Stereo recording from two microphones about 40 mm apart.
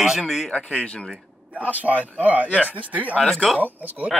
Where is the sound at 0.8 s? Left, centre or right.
Left.